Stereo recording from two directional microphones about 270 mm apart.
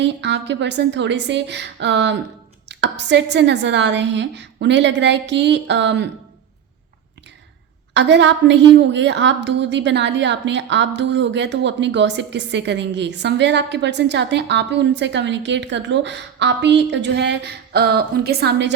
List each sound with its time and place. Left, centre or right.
0.0 s a woman's voice: right
7.9 s a woman's voice: right